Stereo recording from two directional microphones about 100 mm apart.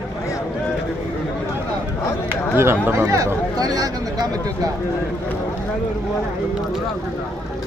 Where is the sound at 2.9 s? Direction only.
30° right (ahead or behind).